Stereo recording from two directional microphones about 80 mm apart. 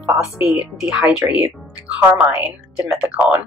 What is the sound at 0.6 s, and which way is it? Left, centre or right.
Speech, centre.